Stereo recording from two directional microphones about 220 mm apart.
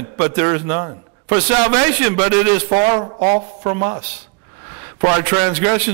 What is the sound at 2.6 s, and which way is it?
Speech, 25° right (ahead or behind).